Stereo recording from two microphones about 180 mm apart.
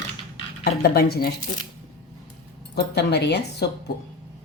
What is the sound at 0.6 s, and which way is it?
Speech, 60° left (ahead or behind).